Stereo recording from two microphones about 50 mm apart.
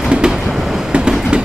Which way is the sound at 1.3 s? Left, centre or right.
Centre.